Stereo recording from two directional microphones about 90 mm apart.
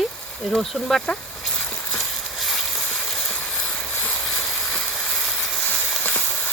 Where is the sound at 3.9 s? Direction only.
20° left (ahead or behind).